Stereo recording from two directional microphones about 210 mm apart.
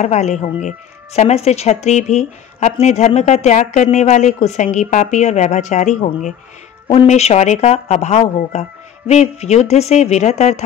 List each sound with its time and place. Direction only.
0.0 s speech: 35° left (ahead or behind)